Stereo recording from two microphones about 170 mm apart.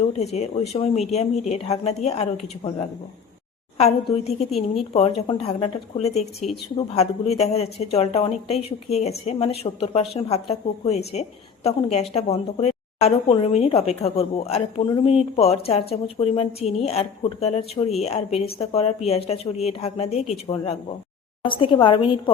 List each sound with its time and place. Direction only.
0.2 s speech: 40° left (ahead or behind)
3.8 s a woman's voice: 35° left (ahead or behind)